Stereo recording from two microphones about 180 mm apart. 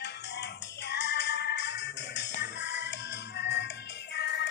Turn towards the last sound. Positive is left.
turn(degrees=70)  # may be behind; listen again after turning